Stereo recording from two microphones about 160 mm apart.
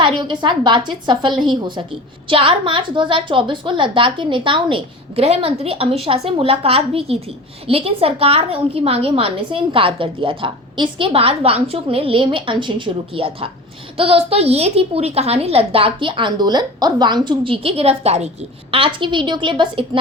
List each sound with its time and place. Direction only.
0.0 s a woman's voice: 30° right (ahead or behind)